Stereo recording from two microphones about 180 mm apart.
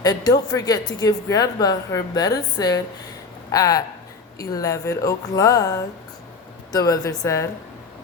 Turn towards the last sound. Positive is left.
turn(degrees=15)  # may be behind; listen again after turning